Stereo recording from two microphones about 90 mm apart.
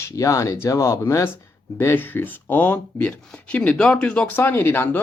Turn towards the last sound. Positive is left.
turn(degrees=25)  # may be behind; listen again after turning